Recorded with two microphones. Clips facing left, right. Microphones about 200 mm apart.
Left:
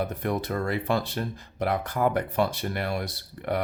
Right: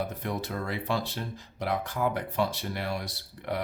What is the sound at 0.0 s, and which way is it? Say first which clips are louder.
Speech: left 4 dB; 55° left (ahead or behind).